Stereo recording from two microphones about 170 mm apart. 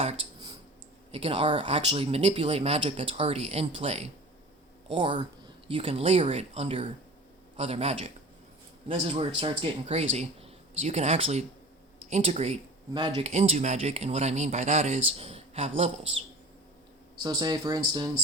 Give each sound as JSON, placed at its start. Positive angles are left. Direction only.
{"t": 1.1, "sound": "speech", "side_deg": -35}
{"t": 12.9, "sound": "speech", "side_deg": -25}
{"t": 13.2, "sound": "speech", "side_deg": -40}
{"t": 17.2, "sound": "speech", "side_deg": -25}